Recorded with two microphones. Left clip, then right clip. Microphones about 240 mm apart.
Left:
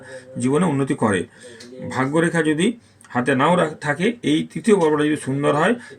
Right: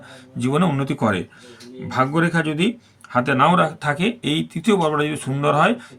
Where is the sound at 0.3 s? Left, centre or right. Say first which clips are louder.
Left 1 dB; right.